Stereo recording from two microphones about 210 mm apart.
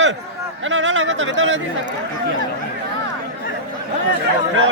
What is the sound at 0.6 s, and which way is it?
Speech, 65° right (ahead or behind).